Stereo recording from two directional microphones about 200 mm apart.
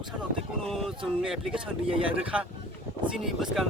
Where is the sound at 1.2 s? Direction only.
Centre (ahead or behind).